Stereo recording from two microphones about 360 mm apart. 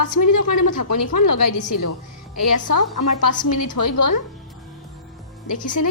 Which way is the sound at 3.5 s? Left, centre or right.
Left.